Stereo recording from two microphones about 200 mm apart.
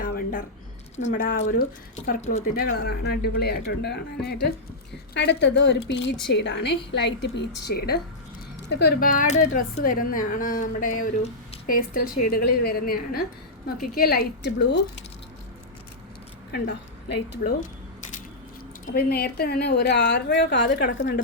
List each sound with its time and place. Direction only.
0.0 s a sound: 45° left (ahead or behind)
0.9 s speech: 40° left (ahead or behind)
2.2 s speech: 35° left (ahead or behind)
2.7 s a woman's voice: 55° left (ahead or behind)
16.5 s a woman's voice: 60° left (ahead or behind)
18.9 s a woman's voice: 50° left (ahead or behind)